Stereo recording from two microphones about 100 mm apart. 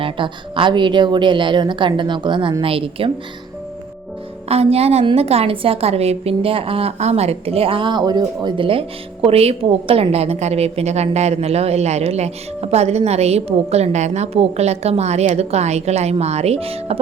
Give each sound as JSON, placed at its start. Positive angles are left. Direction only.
{"t": 0.0, "sound": "a woman's voice", "side_deg": -60}
{"t": 4.4, "sound": "a woman's voice", "side_deg": -90}
{"t": 9.2, "sound": "a woman's voice", "side_deg": -90}